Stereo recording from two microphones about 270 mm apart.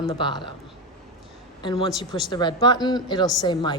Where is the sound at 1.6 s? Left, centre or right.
Centre.